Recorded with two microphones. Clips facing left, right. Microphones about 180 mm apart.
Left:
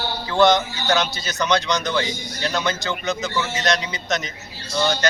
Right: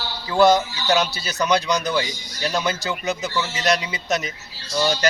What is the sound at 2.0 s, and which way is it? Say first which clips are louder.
Speech: left 4 dB; 50° left (ahead or behind).